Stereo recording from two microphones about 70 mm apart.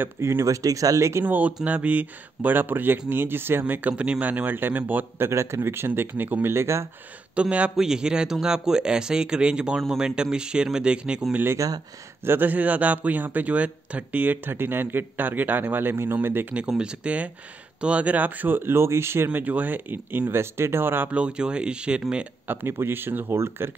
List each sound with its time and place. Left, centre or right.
0.0 s speech: right
1.2 s a man's voice: right
5.3 s speech: right
7.3 s a man's voice: centre
11.5 s speech: right
12.3 s a man's voice: right
16.5 s a man's voice: centre; by 19.3 s right
19.3 s a man's voice: right
21.1 s a man's voice: centre
22.5 s speech: right